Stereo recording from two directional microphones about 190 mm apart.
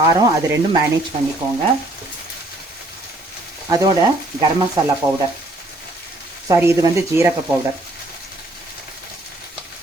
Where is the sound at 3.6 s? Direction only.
20° right (ahead or behind).